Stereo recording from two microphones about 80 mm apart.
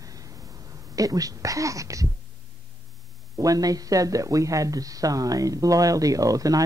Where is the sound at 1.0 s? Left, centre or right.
Right.